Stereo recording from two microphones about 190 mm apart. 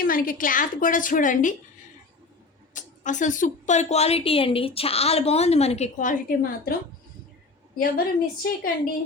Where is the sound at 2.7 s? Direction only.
40° left (ahead or behind).